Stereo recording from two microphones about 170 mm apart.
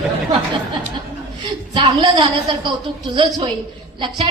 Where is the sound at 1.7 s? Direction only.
30° right (ahead or behind).